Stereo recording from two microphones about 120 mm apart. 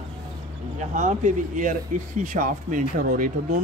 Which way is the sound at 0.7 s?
90° right.